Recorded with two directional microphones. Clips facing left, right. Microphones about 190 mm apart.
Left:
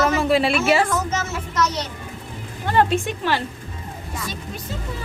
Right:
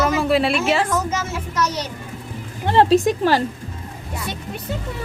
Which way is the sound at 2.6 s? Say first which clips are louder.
Right 5 dB; 25° right (ahead or behind).